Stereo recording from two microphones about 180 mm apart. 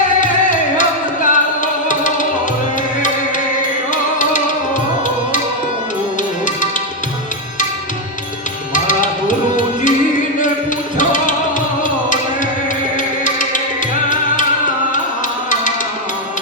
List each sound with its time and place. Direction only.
0.2 s music: 45° left (ahead or behind)
3.9 s music: 45° left (ahead or behind)
6.4 s music: 45° left (ahead or behind)
8.7 s music: 45° left (ahead or behind)
10.9 s music: 45° left (ahead or behind)